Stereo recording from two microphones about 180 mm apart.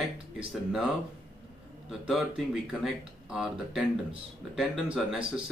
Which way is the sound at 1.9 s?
Centre (ahead or behind).